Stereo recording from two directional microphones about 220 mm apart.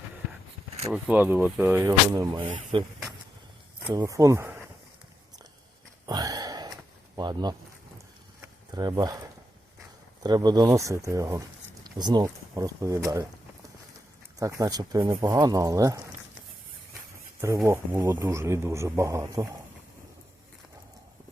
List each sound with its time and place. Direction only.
0.9 s speech: 5° right (ahead or behind)
6.1 s a sound: 15° right (ahead or behind)
7.2 s speech: 20° right (ahead or behind)
8.4 s a sound: 15° right (ahead or behind)
10.2 s speech: 20° right (ahead or behind)
14.3 s speech: 15° right (ahead or behind)
17.4 s speech: 15° right (ahead or behind)